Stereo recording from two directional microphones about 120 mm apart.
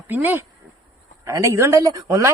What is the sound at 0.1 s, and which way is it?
Speech, 15° right (ahead or behind).